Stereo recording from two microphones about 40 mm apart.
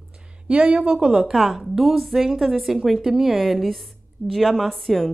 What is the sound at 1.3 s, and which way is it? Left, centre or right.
A woman's voice, centre.